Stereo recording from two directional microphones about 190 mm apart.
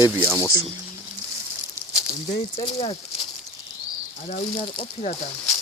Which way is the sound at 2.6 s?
30° left (ahead or behind).